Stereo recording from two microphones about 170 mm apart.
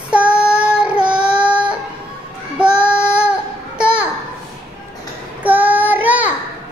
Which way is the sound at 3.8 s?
5° right (ahead or behind).